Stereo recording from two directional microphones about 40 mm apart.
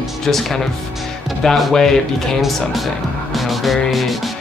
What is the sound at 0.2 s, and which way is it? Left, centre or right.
Speech, centre.